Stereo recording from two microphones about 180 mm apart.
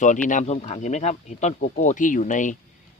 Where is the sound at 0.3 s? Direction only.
40° left (ahead or behind).